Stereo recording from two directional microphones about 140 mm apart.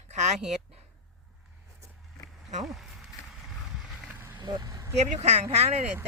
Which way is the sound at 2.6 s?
Centre (ahead or behind).